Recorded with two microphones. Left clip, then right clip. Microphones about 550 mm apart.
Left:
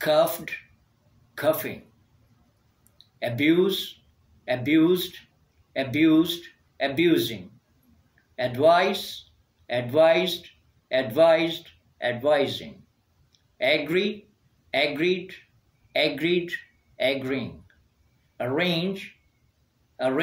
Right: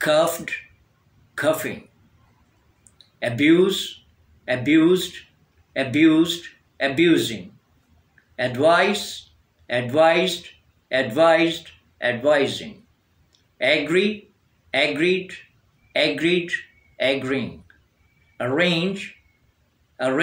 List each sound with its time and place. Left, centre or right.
0.0 s speech: left
3.2 s speech: left
8.4 s speech: left
13.3 s a sound: left
14.7 s a man's voice: left